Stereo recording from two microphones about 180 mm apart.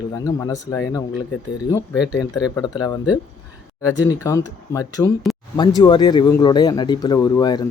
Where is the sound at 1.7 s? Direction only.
20° left (ahead or behind).